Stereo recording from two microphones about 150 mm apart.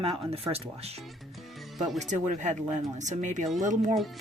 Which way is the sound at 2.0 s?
50° right (ahead or behind).